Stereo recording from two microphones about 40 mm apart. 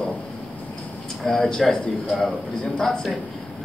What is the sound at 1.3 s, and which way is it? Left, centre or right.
Speech, centre.